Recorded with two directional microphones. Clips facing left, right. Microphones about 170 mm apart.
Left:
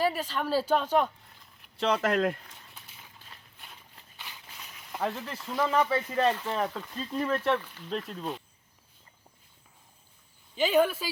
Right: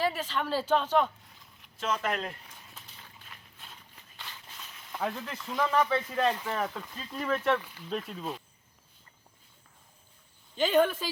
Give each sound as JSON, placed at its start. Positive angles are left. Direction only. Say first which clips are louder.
{"t": 0.0, "sound": "speech", "louder": "left 2 dB", "side_deg": 10}
{"t": 1.7, "sound": "speech", "louder": "left 5 dB", "side_deg": 35}
{"t": 2.0, "sound": "speech", "louder": "left 7 dB", "side_deg": 45}
{"t": 4.2, "sound": "a sound", "louder": "even", "side_deg": 10}
{"t": 5.9, "sound": "speech", "louder": "left 2 dB", "side_deg": 5}
{"t": 6.4, "sound": "speech", "louder": "left 2 dB", "side_deg": 15}
{"t": 6.7, "sound": "speech", "louder": "left 5 dB", "side_deg": 0}
{"t": 10.5, "sound": "speech", "louder": "even", "side_deg": 10}